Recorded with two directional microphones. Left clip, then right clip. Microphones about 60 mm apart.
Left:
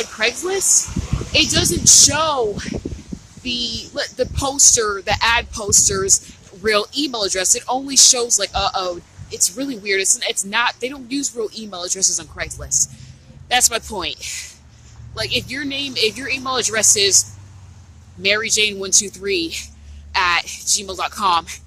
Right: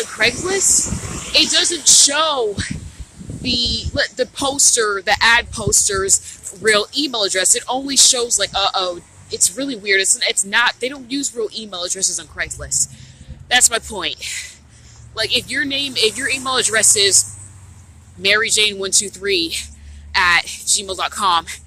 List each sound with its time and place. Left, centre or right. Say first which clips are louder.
0.2 s speech: right 3 dB; left
0.7 s speech: left 1 dB; centre
2.0 s speech: even; left
3.4 s speech: right 4 dB; left
9.6 s speech: right 5 dB; left
10.5 s speech: right 2 dB; left
12.5 s speech: left 2 dB; left
15.1 s speech: right 4 dB; left
18.2 s speech: right 2 dB; left